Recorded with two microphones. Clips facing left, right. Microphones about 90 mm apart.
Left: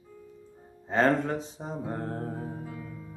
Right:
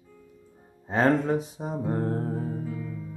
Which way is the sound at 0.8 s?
10° right (ahead or behind).